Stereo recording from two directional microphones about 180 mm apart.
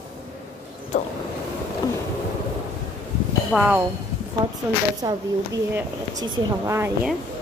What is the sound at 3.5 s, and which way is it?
Speech, 5° right (ahead or behind).